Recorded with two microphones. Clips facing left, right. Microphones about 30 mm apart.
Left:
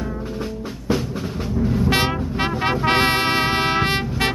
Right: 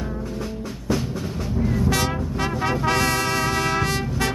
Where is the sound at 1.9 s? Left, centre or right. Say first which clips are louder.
Left 3 dB; left.